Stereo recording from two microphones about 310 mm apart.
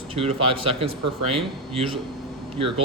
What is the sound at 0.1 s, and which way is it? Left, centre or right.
Speech, centre.